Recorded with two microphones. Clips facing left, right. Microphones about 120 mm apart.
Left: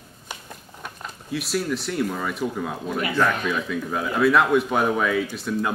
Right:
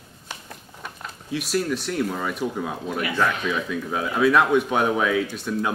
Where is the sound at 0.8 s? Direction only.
Centre (ahead or behind).